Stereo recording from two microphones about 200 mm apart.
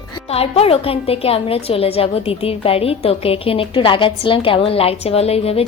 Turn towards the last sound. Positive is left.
turn(degrees=30)  # may be behind; listen again after turning